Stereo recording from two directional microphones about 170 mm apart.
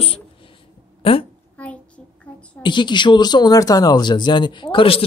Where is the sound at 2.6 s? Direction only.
25° left (ahead or behind).